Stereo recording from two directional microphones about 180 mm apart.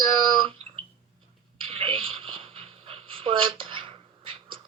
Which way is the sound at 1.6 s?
30° right (ahead or behind).